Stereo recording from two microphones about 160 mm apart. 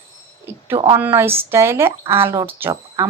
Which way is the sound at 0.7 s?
35° right (ahead or behind).